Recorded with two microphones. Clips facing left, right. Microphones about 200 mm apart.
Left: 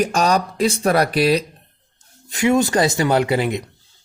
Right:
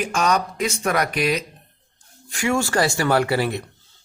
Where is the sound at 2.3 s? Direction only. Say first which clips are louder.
Left 5 dB; 20° left (ahead or behind).